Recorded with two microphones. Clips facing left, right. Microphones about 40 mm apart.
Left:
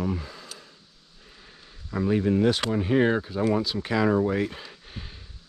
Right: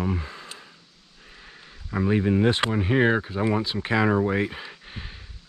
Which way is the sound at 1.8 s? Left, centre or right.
Right.